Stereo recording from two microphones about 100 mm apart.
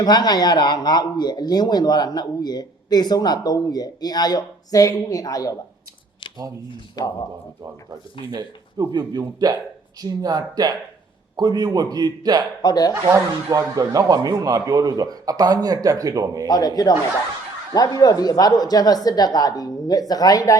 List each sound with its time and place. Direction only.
0.0 s a man's voice: 45° left (ahead or behind)
6.9 s a woman's voice: 40° left (ahead or behind)
8.3 s a man's voice: 40° right (ahead or behind)
12.6 s a woman's voice: 40° left (ahead or behind)
12.9 s speech: 30° right (ahead or behind)
16.5 s a woman's voice: 40° left (ahead or behind)